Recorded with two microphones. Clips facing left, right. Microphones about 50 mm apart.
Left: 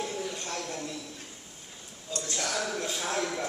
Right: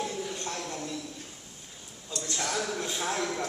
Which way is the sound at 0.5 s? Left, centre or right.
Centre.